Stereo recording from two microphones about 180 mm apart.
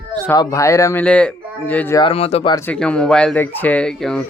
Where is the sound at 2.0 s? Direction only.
35° left (ahead or behind).